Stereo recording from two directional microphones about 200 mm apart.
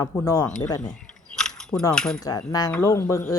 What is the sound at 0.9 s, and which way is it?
Keys jangling, 5° left (ahead or behind).